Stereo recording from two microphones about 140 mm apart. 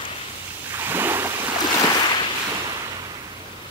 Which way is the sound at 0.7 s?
15° right (ahead or behind).